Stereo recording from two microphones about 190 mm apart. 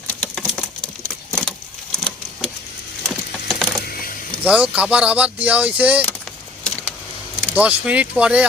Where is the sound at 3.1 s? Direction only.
Centre (ahead or behind).